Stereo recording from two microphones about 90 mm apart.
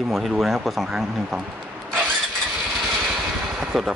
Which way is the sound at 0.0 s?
5° right (ahead or behind).